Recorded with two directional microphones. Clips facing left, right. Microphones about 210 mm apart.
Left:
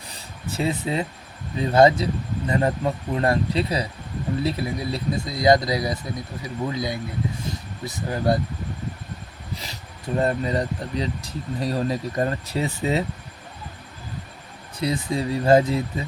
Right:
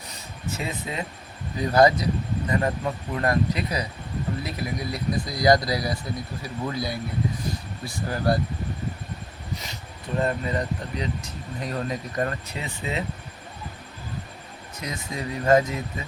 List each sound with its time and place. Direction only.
0.1 s a sound: 30° left (ahead or behind)
1.5 s speech: 25° left (ahead or behind)
10.2 s speech: 35° left (ahead or behind)
14.8 s speech: 30° left (ahead or behind)